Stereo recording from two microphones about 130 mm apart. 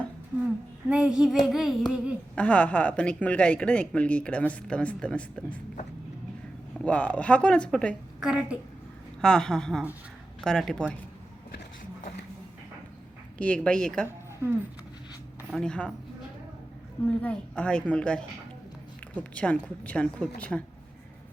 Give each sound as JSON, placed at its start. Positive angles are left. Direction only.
{"t": 0.9, "sound": "humming", "side_deg": -5}
{"t": 2.3, "sound": "speech", "side_deg": 10}
{"t": 6.8, "sound": "speech", "side_deg": 10}
{"t": 8.2, "sound": "a woman's voice", "side_deg": -10}
{"t": 9.2, "sound": "humming", "side_deg": 5}
{"t": 13.4, "sound": "speech", "side_deg": 10}
{"t": 15.5, "sound": "speech", "side_deg": 5}
{"t": 17.2, "sound": "speech", "side_deg": 10}